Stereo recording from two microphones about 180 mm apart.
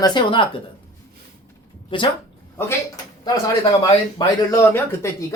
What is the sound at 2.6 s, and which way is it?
Speech, 15° left (ahead or behind).